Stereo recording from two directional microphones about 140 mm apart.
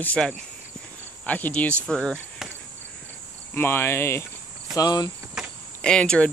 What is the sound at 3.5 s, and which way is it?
Speech, 15° left (ahead or behind).